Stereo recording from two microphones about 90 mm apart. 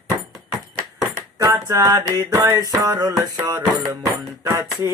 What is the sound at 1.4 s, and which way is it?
Mantra, 40° right (ahead or behind).